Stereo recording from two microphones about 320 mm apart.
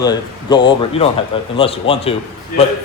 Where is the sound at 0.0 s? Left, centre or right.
Centre.